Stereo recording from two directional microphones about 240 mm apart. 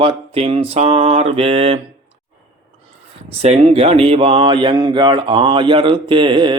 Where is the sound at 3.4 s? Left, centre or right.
Right.